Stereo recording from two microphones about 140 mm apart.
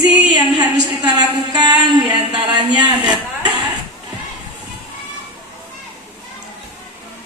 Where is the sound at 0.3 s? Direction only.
30° right (ahead or behind).